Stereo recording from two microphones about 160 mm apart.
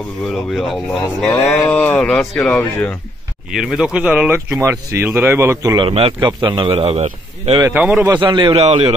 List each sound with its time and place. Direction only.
0.2 s speech: 5° left (ahead or behind)
3.5 s speech: 5° right (ahead or behind)
5.8 s speech: 35° right (ahead or behind)
7.7 s speech: 10° right (ahead or behind)
8.1 s a man's voice: 30° right (ahead or behind)
8.5 s speech: 40° right (ahead or behind)